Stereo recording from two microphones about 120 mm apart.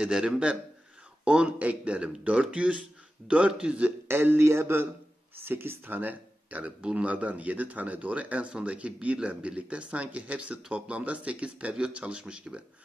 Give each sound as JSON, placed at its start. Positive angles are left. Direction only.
{"t": 0.0, "sound": "a man's voice", "side_deg": -5}